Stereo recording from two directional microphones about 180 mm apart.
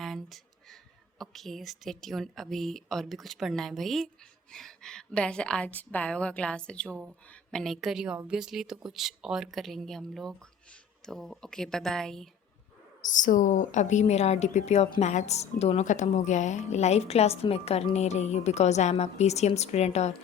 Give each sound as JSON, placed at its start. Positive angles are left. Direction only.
{"t": 0.0, "sound": "a sound", "side_deg": 0}
{"t": 1.2, "sound": "a woman's voice", "side_deg": 0}
{"t": 13.0, "sound": "a woman's voice", "side_deg": 45}